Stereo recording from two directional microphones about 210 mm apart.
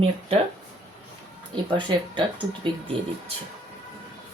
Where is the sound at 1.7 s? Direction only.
20° right (ahead or behind).